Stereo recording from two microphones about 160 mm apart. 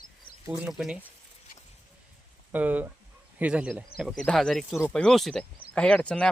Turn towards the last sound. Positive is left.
turn(degrees=5)  # may be behind; listen again after turning